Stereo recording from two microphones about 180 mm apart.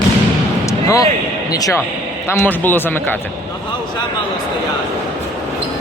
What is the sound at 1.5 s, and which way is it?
A man's voice, 20° left (ahead or behind).